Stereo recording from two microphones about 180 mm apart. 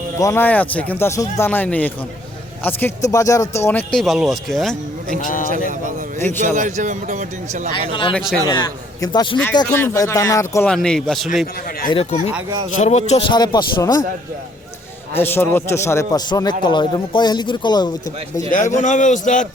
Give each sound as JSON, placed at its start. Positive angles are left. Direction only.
{"t": 0.2, "sound": "speech", "side_deg": 15}
{"t": 3.7, "sound": "speech", "side_deg": 5}
{"t": 5.2, "sound": "a man's voice", "side_deg": 50}
{"t": 6.1, "sound": "a man's voice", "side_deg": 10}
{"t": 6.4, "sound": "speech", "side_deg": -45}
{"t": 8.1, "sound": "speech", "side_deg": 0}
{"t": 8.4, "sound": "a man's voice", "side_deg": 20}
{"t": 9.6, "sound": "speech", "side_deg": 10}
{"t": 10.7, "sound": "speech", "side_deg": 5}
{"t": 11.9, "sound": "a man's voice", "side_deg": 35}
{"t": 15.1, "sound": "a man's voice", "side_deg": 10}
{"t": 18.8, "sound": "a man's voice", "side_deg": 45}